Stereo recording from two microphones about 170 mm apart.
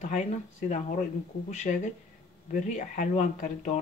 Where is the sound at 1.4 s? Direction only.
45° left (ahead or behind).